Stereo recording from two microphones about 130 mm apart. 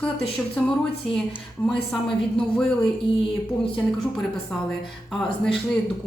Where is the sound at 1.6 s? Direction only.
15° left (ahead or behind).